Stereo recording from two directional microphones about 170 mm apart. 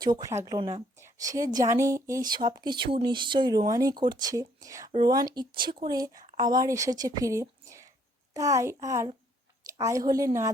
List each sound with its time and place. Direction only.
0.0 s a woman's voice: 20° right (ahead or behind)